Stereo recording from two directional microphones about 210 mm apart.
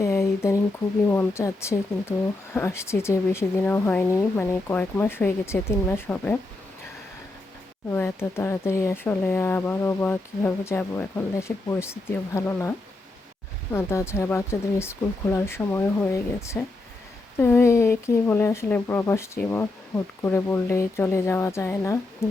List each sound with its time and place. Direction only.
0.0 s a sound: 10° left (ahead or behind)
1.0 s speech: 10° left (ahead or behind)
7.9 s speech: 10° left (ahead or behind)
13.7 s speech: 10° left (ahead or behind)
22.2 s humming: 10° left (ahead or behind)